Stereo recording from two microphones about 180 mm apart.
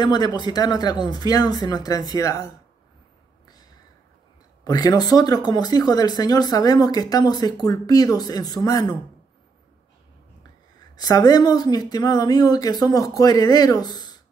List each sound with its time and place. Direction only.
0.0 s speech: 25° left (ahead or behind)
4.6 s speech: 20° left (ahead or behind)
11.0 s speech: 20° left (ahead or behind)